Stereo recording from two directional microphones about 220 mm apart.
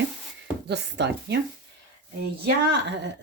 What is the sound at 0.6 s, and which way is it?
Speech, 50° right (ahead or behind).